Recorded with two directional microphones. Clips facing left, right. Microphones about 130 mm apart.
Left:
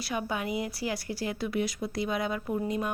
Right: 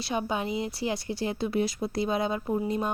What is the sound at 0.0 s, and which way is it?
A woman's voice, 25° right (ahead or behind).